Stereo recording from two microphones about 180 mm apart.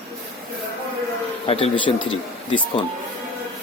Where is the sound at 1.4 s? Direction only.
30° left (ahead or behind).